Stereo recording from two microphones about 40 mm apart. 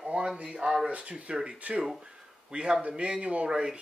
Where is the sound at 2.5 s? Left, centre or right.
Right.